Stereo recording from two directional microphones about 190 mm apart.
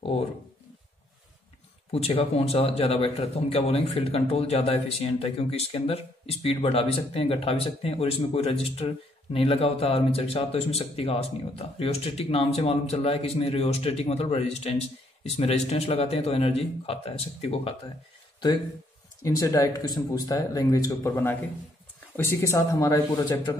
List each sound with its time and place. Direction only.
1.9 s speech: 30° left (ahead or behind)
19.2 s speech: 15° left (ahead or behind)